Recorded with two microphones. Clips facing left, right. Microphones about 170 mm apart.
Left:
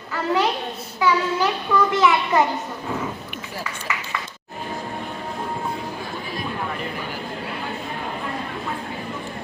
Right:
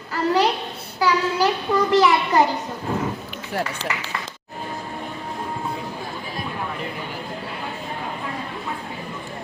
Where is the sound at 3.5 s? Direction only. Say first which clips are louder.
Right 8 dB; 65° right (ahead or behind).